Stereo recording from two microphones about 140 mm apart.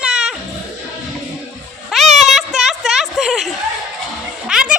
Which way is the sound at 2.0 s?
55° right (ahead or behind).